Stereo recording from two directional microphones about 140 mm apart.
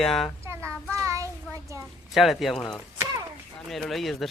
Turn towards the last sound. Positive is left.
turn(degrees=0)  # may be behind; listen again after turning